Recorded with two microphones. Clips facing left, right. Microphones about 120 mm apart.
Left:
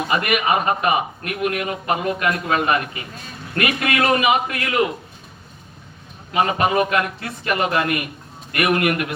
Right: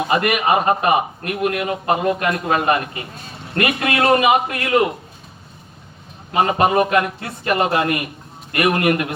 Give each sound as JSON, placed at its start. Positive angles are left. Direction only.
{"t": 0.1, "sound": "a man's voice", "side_deg": -35}
{"t": 6.3, "sound": "a man's voice", "side_deg": -35}